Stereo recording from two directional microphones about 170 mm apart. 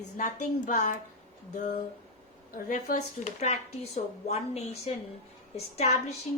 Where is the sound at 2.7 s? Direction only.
50° left (ahead or behind).